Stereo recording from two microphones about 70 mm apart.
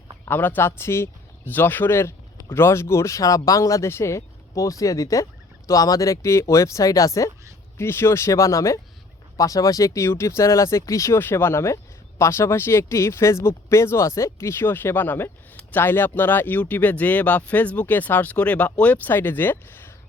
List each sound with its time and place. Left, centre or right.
0.3 s speech: left
7.8 s speech: left
11.2 s speech: left